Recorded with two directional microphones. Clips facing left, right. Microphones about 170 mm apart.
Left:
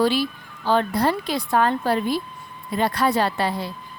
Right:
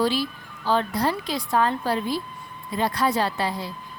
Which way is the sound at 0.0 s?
65° left (ahead or behind).